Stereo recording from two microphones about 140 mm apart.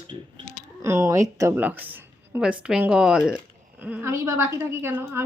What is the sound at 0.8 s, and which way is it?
A woman's voice, 20° right (ahead or behind).